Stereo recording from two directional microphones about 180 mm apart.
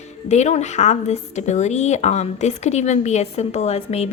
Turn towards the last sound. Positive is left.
turn(degrees=35)  # may be behind; listen again after turning